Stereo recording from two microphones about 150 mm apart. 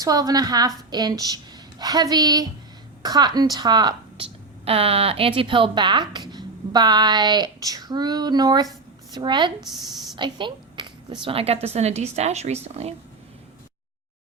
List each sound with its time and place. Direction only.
0.0 s a woman's voice: 25° right (ahead or behind)
4.6 s a woman's voice: 40° right (ahead or behind)